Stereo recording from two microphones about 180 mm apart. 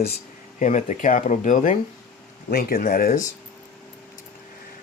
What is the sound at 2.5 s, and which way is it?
Speech, 55° left (ahead or behind).